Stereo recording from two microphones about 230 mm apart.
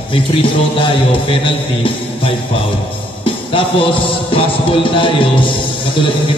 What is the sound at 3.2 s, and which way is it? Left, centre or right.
Music, left.